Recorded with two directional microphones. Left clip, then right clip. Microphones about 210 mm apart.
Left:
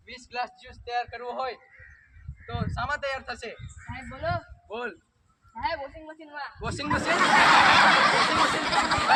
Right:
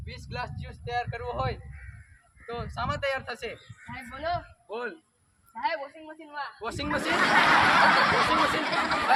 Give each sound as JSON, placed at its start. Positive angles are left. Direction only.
{"t": 0.0, "sound": "speech", "side_deg": -5}
{"t": 7.2, "sound": "speech", "side_deg": 45}